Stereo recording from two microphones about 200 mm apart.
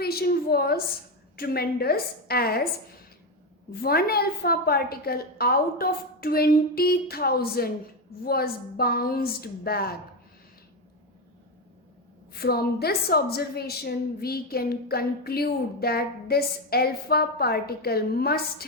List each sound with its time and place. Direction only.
0.0 s a woman's voice: 50° left (ahead or behind)
3.8 s a woman's voice: 50° left (ahead or behind)
12.4 s a woman's voice: 50° left (ahead or behind)